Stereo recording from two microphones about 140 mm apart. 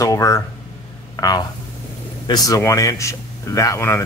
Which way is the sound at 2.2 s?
25° left (ahead or behind).